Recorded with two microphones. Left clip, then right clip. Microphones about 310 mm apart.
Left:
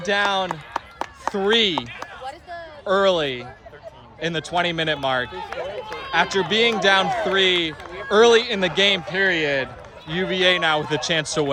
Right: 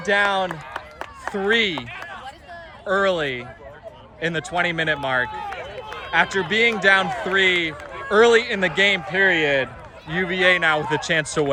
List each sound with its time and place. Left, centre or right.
0.0 s a man's voice: centre
0.4 s chop: centre
1.3 s a man's voice: centre
2.0 s a sound: left
2.8 s a man's voice: centre
5.4 s run: left
6.1 s a man's voice: centre